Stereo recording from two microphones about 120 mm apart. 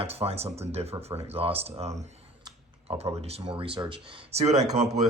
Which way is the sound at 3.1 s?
60° right (ahead or behind).